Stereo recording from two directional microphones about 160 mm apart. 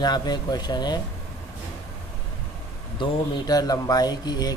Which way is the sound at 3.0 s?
25° left (ahead or behind).